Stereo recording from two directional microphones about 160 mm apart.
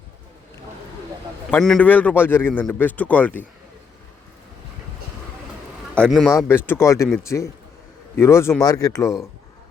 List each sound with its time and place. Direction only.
1.5 s a man's voice: centre (ahead or behind)
5.9 s a man's voice: 5° left (ahead or behind); by 9.1 s 20° left (ahead or behind)